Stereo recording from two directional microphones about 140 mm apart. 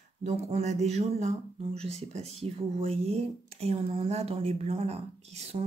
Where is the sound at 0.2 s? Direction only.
50° right (ahead or behind).